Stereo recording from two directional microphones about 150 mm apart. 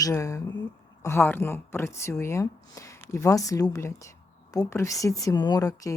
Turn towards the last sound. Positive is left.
turn(degrees=25)  # may be behind; listen again after turning